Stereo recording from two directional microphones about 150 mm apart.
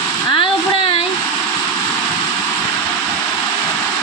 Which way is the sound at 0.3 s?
35° left (ahead or behind).